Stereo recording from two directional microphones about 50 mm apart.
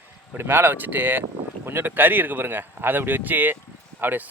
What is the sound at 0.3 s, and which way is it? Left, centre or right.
Speech, right.